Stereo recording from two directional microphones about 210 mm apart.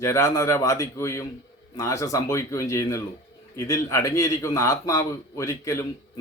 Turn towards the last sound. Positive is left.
turn(degrees=15)  # may be behind; listen again after turning